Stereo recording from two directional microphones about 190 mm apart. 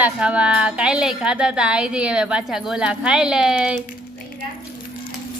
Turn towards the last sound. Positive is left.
turn(degrees=-5)  # may be behind; listen again after turning